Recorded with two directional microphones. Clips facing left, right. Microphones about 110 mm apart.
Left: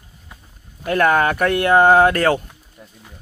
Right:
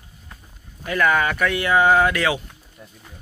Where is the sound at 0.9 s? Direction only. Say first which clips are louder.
Left 4 dB; 50° left (ahead or behind).